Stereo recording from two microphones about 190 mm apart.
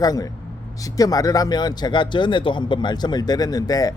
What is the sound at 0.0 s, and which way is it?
Speech, 20° left (ahead or behind).